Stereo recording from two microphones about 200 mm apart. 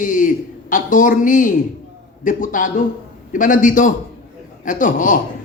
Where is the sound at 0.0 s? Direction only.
40° left (ahead or behind).